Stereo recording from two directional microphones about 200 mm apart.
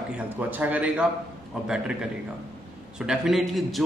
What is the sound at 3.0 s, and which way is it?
Speech, centre (ahead or behind).